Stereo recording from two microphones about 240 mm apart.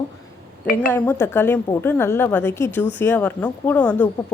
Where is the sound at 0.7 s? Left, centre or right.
Left.